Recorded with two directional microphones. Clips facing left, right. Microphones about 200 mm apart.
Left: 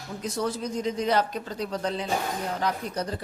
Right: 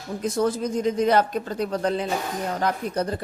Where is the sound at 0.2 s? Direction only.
50° right (ahead or behind).